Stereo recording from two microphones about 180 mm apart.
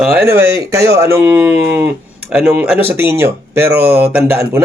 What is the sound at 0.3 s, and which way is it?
Speech, 15° right (ahead or behind).